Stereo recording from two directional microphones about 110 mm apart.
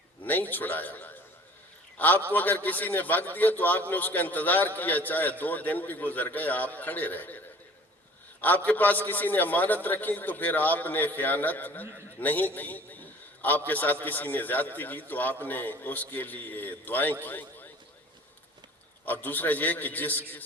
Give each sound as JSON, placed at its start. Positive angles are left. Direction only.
{"t": 0.5, "sound": "a man's voice", "side_deg": 15}
{"t": 19.0, "sound": "a man's voice", "side_deg": 15}